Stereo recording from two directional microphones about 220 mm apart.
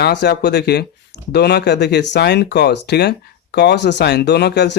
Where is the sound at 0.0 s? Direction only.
50° left (ahead or behind).